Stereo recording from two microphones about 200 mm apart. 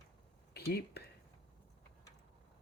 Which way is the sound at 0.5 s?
55° left (ahead or behind).